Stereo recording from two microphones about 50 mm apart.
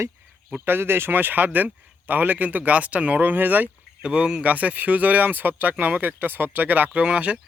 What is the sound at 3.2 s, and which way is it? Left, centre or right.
Speech, right.